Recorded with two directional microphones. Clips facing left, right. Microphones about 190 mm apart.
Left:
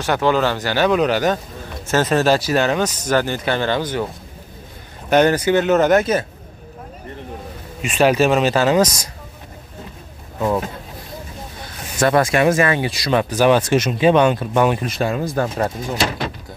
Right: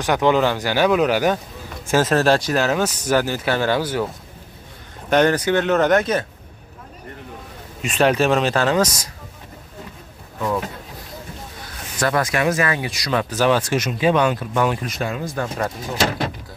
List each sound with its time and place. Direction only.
0.0 s speech: 15° right (ahead or behind)
5.1 s speech: 5° left (ahead or behind)
7.8 s speech: centre (ahead or behind)
12.0 s speech: 25° left (ahead or behind)